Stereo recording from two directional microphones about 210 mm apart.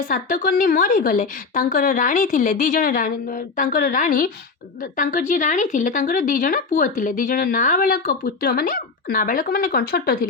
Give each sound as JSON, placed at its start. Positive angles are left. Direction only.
{"t": 0.1, "sound": "speech", "side_deg": 40}